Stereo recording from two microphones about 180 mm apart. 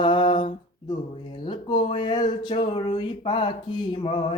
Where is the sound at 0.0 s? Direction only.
25° left (ahead or behind).